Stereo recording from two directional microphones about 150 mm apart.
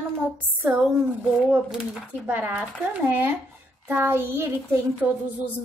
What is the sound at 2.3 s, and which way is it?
Child singing, 10° right (ahead or behind).